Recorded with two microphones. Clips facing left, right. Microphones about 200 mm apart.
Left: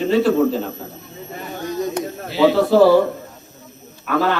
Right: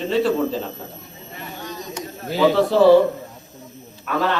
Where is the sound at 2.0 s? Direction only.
55° left (ahead or behind).